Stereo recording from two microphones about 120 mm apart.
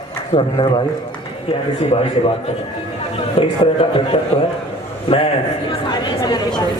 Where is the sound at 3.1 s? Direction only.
50° left (ahead or behind).